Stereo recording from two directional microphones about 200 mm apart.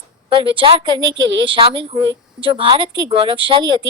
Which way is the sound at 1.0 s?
70° right (ahead or behind).